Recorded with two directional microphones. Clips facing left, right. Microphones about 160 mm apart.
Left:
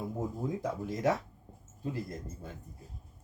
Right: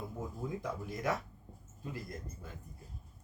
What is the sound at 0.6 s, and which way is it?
Speech, 20° left (ahead or behind).